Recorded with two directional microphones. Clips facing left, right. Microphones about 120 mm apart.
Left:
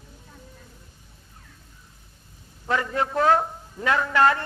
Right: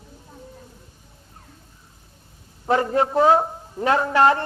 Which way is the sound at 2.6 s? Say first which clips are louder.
Right 5 dB; 35° right (ahead or behind).